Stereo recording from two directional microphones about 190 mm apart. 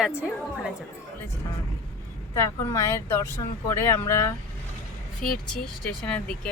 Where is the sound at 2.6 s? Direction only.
15° left (ahead or behind).